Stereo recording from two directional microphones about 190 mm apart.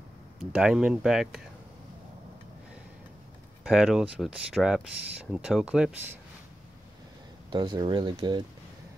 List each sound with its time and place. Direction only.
0.4 s speech: 5° right (ahead or behind)
3.6 s speech: centre (ahead or behind)
7.5 s speech: 25° right (ahead or behind)